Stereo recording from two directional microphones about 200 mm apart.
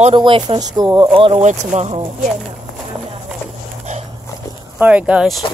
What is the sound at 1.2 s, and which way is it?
Speech, 35° right (ahead or behind).